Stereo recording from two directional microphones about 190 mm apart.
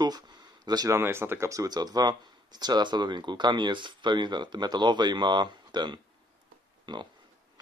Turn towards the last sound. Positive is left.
turn(degrees=-25)  # may be behind; listen again after turning